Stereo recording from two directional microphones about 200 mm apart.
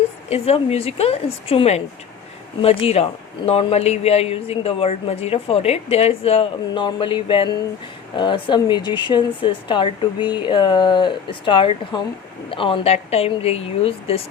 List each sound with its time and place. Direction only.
0.3 s a woman's voice: 30° left (ahead or behind)